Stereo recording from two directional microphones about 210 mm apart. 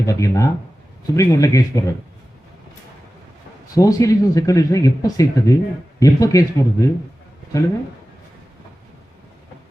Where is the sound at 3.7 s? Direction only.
15° left (ahead or behind).